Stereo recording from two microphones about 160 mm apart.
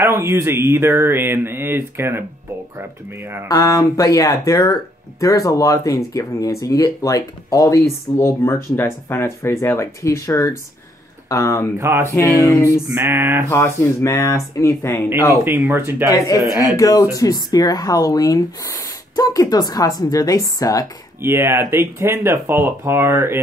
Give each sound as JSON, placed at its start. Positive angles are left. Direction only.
{"t": 0.0, "sound": "speech", "side_deg": -15}
{"t": 3.4, "sound": "speech", "side_deg": 20}
{"t": 11.8, "sound": "speech", "side_deg": -15}
{"t": 12.4, "sound": "speech", "side_deg": 20}
{"t": 12.9, "sound": "speech", "side_deg": -15}
{"t": 13.5, "sound": "speech", "side_deg": 20}
{"t": 15.4, "sound": "speech", "side_deg": -15}
{"t": 16.1, "sound": "speech", "side_deg": 20}
{"t": 21.2, "sound": "speech", "side_deg": -15}